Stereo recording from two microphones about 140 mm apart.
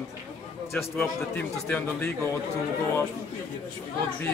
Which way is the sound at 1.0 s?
10° left (ahead or behind).